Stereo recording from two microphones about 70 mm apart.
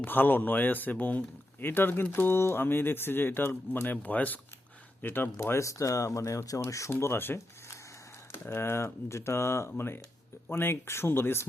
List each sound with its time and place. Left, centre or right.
0.0 s speech: left
6.9 s speech: left